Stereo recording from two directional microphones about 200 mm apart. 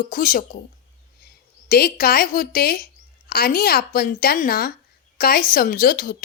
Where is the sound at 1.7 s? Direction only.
45° left (ahead or behind).